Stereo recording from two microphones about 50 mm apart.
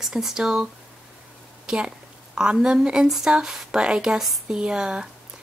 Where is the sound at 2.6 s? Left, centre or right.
Centre.